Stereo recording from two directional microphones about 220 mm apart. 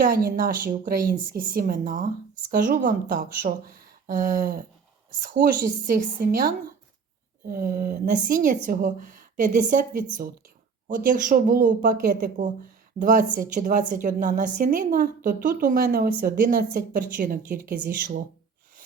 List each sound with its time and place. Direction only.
0.0 s a woman's voice: 40° right (ahead or behind)